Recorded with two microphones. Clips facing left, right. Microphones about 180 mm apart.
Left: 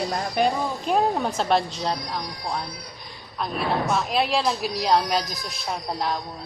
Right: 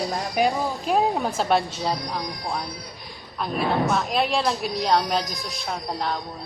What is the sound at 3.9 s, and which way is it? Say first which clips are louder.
Speech: even; centre (ahead or behind).